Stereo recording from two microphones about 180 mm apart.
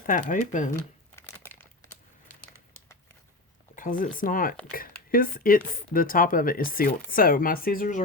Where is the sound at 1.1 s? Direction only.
10° left (ahead or behind).